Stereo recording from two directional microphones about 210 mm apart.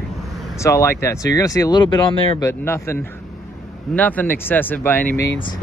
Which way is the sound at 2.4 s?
10° left (ahead or behind).